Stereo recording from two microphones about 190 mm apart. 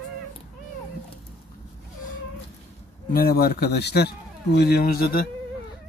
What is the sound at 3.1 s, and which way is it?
A man's voice, 55° left (ahead or behind).